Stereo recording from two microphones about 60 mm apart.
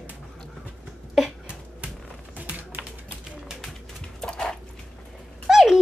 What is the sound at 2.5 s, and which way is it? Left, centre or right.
Typing, right.